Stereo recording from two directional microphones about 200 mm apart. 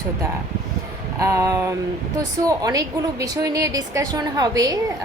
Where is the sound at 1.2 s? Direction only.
15° right (ahead or behind).